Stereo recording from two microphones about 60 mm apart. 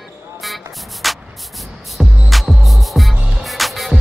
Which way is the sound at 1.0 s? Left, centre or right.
Centre.